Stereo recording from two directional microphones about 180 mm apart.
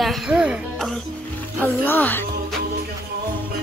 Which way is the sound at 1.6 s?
10° left (ahead or behind).